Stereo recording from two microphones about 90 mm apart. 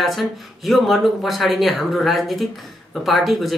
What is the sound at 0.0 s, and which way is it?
Speech, centre (ahead or behind).